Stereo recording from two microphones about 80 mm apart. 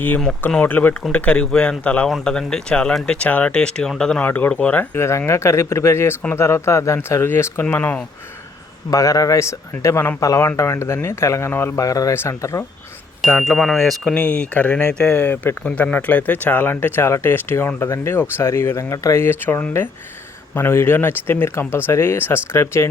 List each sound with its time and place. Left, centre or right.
0.6 s speech: left
4.2 s speech: centre
4.9 s speech: left
8.9 s speech: left
11.8 s speech: left
12.1 s speech: left
13.4 s speech: centre
14.1 s speech: centre; by 19.2 s left
19.2 s speech: left